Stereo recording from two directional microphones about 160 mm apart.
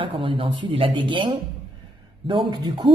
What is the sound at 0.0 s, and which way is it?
Speech, 35° right (ahead or behind).